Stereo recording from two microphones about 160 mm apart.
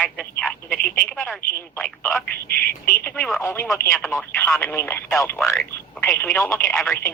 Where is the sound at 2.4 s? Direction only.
65° left (ahead or behind).